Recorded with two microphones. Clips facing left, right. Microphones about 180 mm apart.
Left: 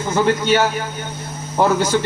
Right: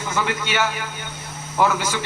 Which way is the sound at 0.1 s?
40° left (ahead or behind).